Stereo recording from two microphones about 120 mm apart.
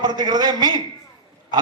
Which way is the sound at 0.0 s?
35° right (ahead or behind).